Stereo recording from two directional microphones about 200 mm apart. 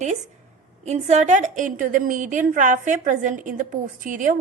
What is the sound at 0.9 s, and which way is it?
A woman's voice, 35° right (ahead or behind).